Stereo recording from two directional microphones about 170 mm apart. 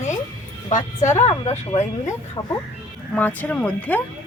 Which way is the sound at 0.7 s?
20° left (ahead or behind).